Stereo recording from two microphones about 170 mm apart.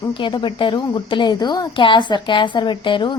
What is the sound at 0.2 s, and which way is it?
A woman's voice, 30° left (ahead or behind).